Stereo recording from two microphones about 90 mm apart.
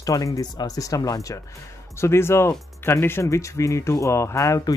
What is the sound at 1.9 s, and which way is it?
Speech, 30° left (ahead or behind).